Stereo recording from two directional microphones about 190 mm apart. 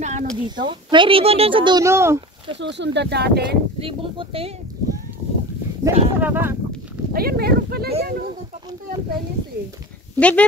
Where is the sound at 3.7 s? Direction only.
30° right (ahead or behind).